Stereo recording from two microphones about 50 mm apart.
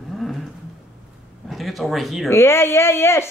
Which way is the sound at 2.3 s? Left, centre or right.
Left.